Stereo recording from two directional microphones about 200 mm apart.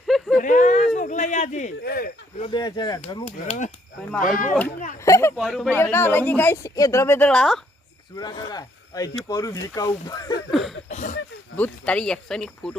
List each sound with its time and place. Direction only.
0.1 s a sound: centre (ahead or behind)
0.4 s a sound: 40° left (ahead or behind)
1.8 s speech: 50° left (ahead or behind)
2.4 s speech: 20° left (ahead or behind)
3.2 s speech: 40° left (ahead or behind)
5.0 s a sound: 15° left (ahead or behind)
5.4 s speech: centre (ahead or behind)
5.7 s a woman's voice: 10° left (ahead or behind)
8.1 s a woman's voice: 20° left (ahead or behind)
10.5 s a sound: centre (ahead or behind)
10.8 s speech: 35° left (ahead or behind)
11.5 s speech: 5° left (ahead or behind)